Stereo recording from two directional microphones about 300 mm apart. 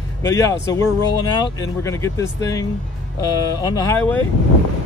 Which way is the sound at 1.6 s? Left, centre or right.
Centre.